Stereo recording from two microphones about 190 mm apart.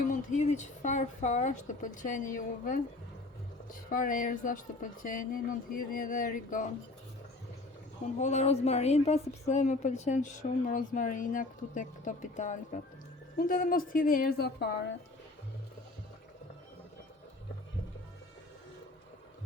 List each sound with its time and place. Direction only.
0.1 s a woman's voice: 40° left (ahead or behind)
8.0 s a woman's voice: 35° left (ahead or behind); by 14.9 s 60° left (ahead or behind)